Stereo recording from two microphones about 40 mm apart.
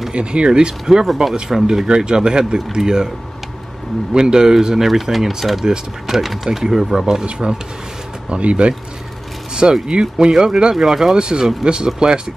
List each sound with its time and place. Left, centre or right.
0.1 s speech: right
1.0 s speech: centre
1.9 s speech: right
4.1 s speech: centre
7.2 s speech: right
10.1 s speech: centre